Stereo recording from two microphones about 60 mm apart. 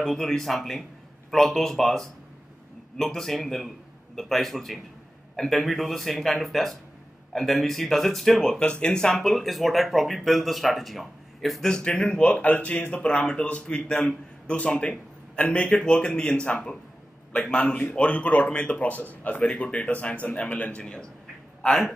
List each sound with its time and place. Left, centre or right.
0.0 s a man's voice: centre
9.1 s speech: centre
11.7 s a man's voice: centre
21.6 s speech: centre